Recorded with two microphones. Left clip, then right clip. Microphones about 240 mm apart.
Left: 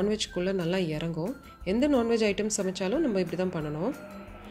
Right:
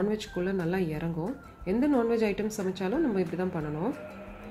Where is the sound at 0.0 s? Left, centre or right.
Left.